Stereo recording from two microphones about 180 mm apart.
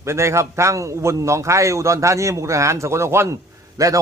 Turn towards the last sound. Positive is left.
turn(degrees=-20)  # may be behind; listen again after turning